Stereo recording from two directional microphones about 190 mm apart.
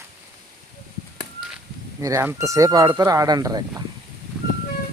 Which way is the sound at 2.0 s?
15° right (ahead or behind).